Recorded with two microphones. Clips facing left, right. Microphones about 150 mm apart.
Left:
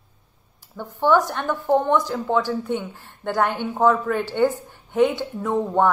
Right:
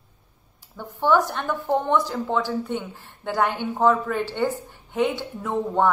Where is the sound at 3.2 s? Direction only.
5° right (ahead or behind).